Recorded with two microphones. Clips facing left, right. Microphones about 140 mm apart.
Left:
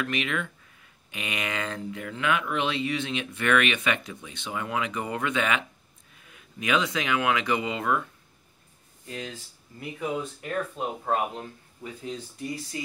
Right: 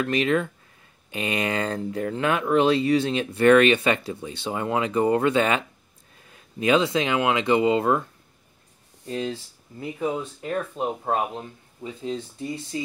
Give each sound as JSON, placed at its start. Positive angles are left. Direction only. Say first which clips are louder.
{"t": 0.0, "sound": "speech", "louder": "right 7 dB", "side_deg": -35}